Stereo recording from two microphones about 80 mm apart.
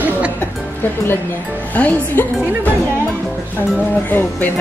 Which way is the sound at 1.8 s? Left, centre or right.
Centre.